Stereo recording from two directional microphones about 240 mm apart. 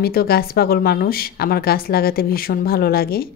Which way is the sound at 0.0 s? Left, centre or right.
Left.